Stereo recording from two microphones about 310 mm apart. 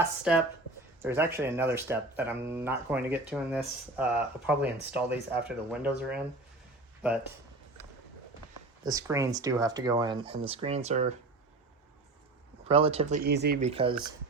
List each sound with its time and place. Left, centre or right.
0.3 s speech: centre
8.8 s speech: centre
12.6 s speech: centre